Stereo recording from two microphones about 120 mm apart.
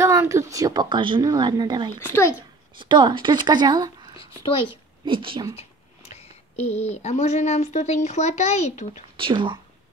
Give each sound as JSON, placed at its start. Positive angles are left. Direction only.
{"t": 0.0, "sound": "speech", "side_deg": -25}
{"t": 1.9, "sound": "a child's voice", "side_deg": 20}
{"t": 2.8, "sound": "speech", "side_deg": -40}
{"t": 4.5, "sound": "a child's voice", "side_deg": 45}
{"t": 5.0, "sound": "speech", "side_deg": -45}
{"t": 5.6, "sound": "speech", "side_deg": 60}
{"t": 9.1, "sound": "speech", "side_deg": -45}